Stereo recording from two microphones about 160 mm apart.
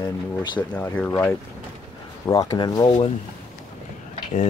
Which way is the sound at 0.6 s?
10° left (ahead or behind).